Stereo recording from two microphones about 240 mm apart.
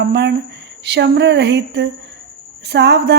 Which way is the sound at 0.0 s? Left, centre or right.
Right.